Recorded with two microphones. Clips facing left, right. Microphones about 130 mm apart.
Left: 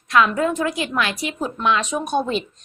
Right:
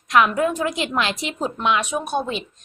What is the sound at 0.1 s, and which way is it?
A woman's voice, 15° right (ahead or behind).